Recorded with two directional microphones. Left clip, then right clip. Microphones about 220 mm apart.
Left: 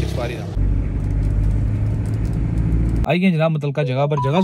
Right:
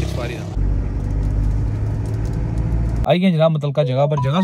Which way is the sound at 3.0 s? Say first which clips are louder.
Right 3 dB; centre (ahead or behind).